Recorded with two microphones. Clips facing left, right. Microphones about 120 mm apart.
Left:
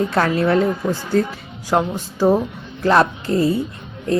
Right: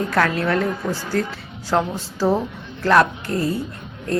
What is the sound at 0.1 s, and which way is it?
Speech, 20° left (ahead or behind).